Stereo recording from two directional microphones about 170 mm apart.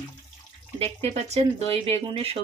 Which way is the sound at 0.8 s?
40° right (ahead or behind).